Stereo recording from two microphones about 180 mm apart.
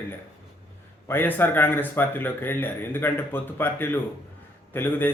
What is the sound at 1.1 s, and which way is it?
A man's voice, 10° left (ahead or behind).